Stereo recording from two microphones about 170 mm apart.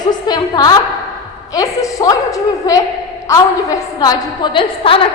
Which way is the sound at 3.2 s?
20° left (ahead or behind).